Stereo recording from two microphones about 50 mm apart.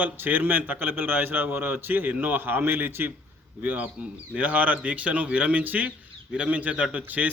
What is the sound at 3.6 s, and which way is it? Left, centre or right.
A man's voice, right.